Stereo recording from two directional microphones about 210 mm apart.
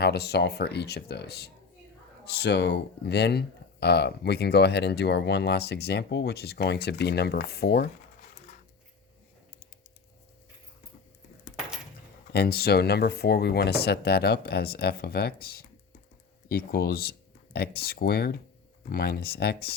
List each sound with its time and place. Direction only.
0.0 s speech: 50° left (ahead or behind)
12.3 s speech: 50° left (ahead or behind)